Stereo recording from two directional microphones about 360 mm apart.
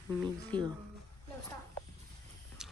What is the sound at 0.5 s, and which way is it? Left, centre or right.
Speech, centre.